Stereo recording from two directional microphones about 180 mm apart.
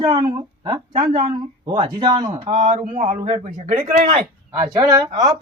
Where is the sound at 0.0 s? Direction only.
20° right (ahead or behind).